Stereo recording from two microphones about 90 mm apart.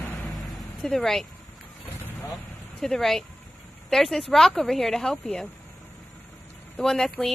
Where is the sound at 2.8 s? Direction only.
5° left (ahead or behind).